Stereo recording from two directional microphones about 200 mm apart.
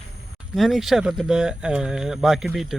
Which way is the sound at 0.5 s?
Centre (ahead or behind).